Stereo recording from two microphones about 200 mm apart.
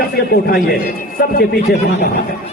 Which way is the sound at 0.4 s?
50° left (ahead or behind).